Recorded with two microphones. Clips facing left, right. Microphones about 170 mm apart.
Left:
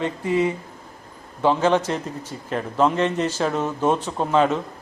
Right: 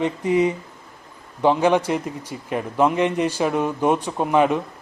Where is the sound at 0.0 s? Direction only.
15° right (ahead or behind).